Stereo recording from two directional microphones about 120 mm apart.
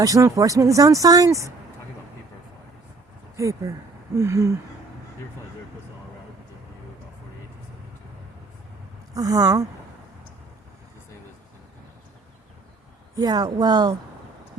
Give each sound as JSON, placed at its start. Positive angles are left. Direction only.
{"t": 0.0, "sound": "speech", "side_deg": -30}
{"t": 3.3, "sound": "speech", "side_deg": -25}
{"t": 9.1, "sound": "speech", "side_deg": -30}
{"t": 13.1, "sound": "a woman's voice", "side_deg": -35}